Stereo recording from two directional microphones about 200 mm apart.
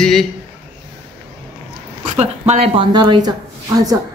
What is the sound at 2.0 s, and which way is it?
A woman's voice, 35° right (ahead or behind).